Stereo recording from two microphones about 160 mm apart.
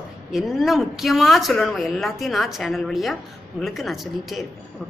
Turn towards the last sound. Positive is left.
turn(degrees=0)  # may be behind; listen again after turning